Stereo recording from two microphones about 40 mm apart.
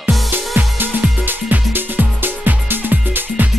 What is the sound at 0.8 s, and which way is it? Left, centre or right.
Music, right.